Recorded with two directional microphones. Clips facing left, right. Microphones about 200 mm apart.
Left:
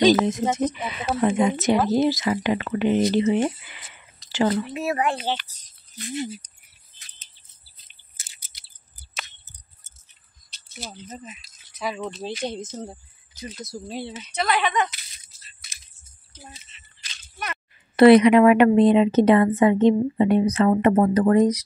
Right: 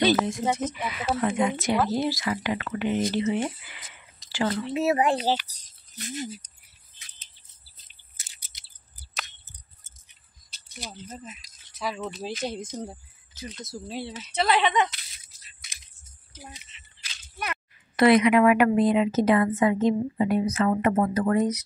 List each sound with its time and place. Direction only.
0.0 s speech: 20° left (ahead or behind)
4.3 s a sound: 25° left (ahead or behind)
4.6 s speech: 25° right (ahead or behind); by 6.4 s 40° right (ahead or behind)
10.9 s speech: 10° left (ahead or behind); by 12.8 s 10° right (ahead or behind)
13.4 s speech: centre (ahead or behind)
14.3 s speech: 25° right (ahead or behind)
15.1 s crushing: 15° right (ahead or behind)
16.3 s a sound: 15° right (ahead or behind)
17.9 s speech: 30° left (ahead or behind)